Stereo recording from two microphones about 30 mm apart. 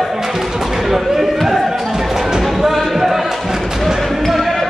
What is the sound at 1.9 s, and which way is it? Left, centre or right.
Music, centre.